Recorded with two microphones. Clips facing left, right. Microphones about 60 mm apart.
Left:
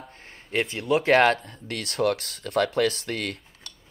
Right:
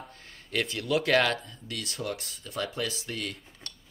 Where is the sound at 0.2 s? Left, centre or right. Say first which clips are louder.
Left 4 dB; left.